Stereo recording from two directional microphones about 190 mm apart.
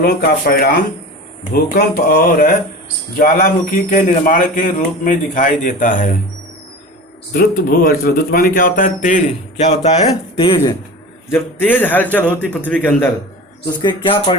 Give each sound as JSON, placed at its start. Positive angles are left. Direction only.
{"t": 0.0, "sound": "a man's voice", "side_deg": 55}
{"t": 7.3, "sound": "a man's voice", "side_deg": 50}
{"t": 11.3, "sound": "a man's voice", "side_deg": 10}
{"t": 13.7, "sound": "speech", "side_deg": 25}